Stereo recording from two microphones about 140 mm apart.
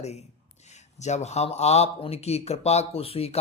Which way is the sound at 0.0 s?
50° left (ahead or behind).